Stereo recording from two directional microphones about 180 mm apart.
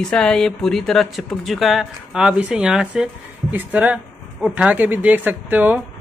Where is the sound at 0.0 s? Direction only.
5° left (ahead or behind).